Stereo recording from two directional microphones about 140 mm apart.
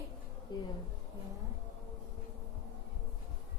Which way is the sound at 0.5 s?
30° left (ahead or behind).